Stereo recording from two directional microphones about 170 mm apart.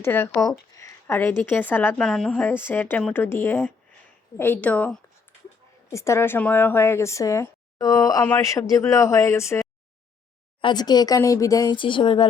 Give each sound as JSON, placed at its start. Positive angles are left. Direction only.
{"t": 0.0, "sound": "speech", "side_deg": 15}